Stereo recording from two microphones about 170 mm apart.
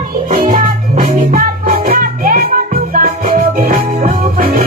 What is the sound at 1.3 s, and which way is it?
Music, 55° right (ahead or behind).